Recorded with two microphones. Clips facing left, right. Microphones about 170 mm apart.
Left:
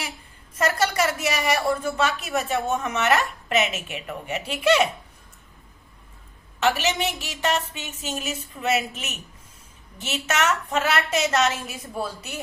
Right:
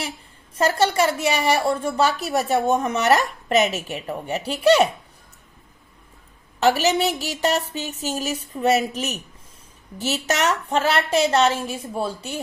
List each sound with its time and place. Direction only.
0.5 s a woman's voice: 30° right (ahead or behind)
6.6 s a woman's voice: 40° right (ahead or behind)